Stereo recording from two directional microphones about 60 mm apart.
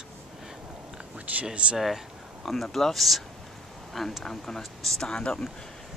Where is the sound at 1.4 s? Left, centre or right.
Centre.